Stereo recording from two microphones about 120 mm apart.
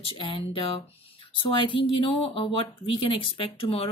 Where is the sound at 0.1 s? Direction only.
50° left (ahead or behind).